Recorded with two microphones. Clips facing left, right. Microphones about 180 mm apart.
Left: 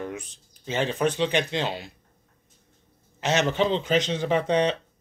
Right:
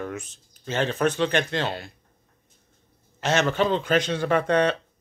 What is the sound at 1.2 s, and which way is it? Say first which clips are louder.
Speech: right 1 dB; 55° right (ahead or behind).